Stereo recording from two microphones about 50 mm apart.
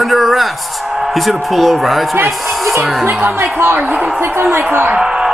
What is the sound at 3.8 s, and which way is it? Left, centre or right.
Speech, right.